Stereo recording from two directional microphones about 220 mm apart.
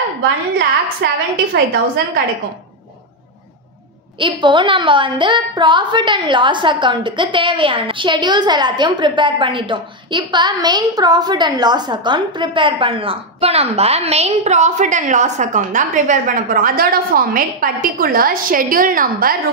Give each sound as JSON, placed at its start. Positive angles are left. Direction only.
{"t": 0.6, "sound": "a woman's voice", "side_deg": -50}
{"t": 4.2, "sound": "a woman's voice", "side_deg": -20}